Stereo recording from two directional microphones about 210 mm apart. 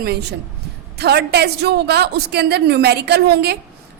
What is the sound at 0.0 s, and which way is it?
A woman's voice, 50° right (ahead or behind).